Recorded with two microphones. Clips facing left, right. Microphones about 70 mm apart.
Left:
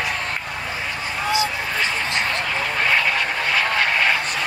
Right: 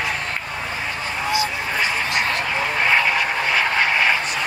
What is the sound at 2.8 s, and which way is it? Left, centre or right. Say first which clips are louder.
Vehicle: right 2 dB; centre.